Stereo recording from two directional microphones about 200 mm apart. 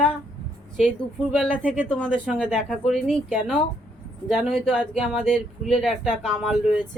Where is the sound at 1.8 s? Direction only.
5° left (ahead or behind).